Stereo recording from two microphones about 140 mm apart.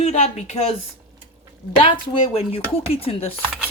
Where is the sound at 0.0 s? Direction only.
55° left (ahead or behind).